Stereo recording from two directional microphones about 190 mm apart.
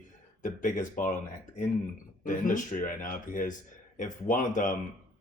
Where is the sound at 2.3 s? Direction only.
45° left (ahead or behind).